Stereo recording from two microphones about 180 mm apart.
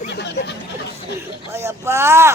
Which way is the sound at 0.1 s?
70° left (ahead or behind).